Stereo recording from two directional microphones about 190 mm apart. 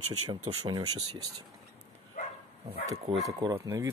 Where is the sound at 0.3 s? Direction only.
25° right (ahead or behind).